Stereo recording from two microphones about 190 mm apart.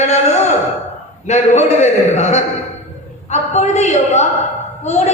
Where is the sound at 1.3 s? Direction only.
40° left (ahead or behind).